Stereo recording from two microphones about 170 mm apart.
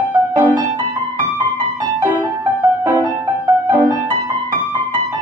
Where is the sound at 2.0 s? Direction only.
20° right (ahead or behind).